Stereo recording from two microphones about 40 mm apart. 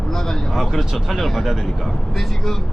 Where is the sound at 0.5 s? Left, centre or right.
Centre.